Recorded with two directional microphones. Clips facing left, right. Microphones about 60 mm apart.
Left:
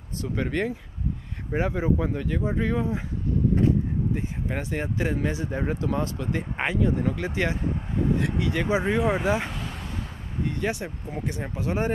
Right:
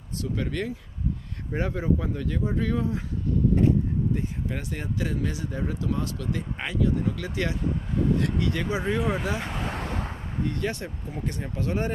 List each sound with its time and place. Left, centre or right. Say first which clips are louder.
0.2 s speech: left 3 dB; left
4.1 s speech: even; left
9.7 s vehicle: right 4 dB; right
10.4 s speech: left 1 dB; centre